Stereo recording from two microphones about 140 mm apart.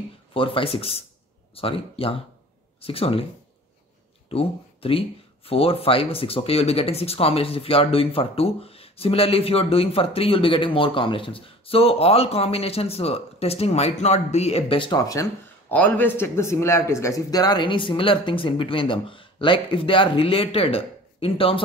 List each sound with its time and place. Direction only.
0.3 s a man's voice: 40° left (ahead or behind)
4.3 s speech: 40° left (ahead or behind)
15.0 s a man's voice: 20° left (ahead or behind); by 21.5 s 40° left (ahead or behind)